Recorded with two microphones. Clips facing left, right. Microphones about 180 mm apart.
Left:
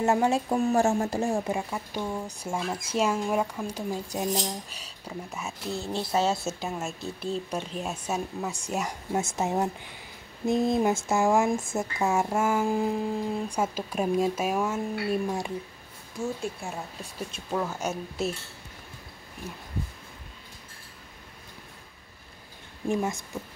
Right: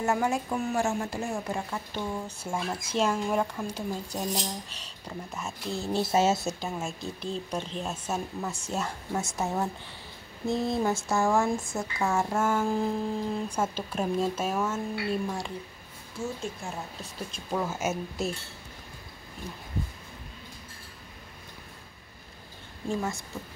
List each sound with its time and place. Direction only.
0.0 s speech: 25° left (ahead or behind)
1.5 s speech: 15° left (ahead or behind); by 6.3 s 5° right (ahead or behind)
6.4 s speech: 5° left (ahead or behind)
17.0 s speech: 5° left (ahead or behind)
19.4 s speech: 5° left (ahead or behind)
22.8 s speech: 20° left (ahead or behind)